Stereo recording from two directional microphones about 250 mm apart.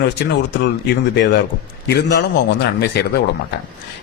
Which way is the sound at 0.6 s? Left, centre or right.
Left.